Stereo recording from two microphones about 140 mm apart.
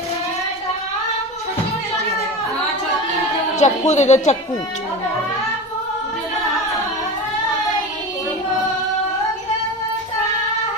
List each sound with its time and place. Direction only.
3.6 s speech: 55° left (ahead or behind)